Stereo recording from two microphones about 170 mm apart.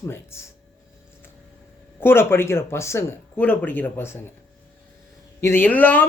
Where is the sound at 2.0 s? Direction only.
15° left (ahead or behind).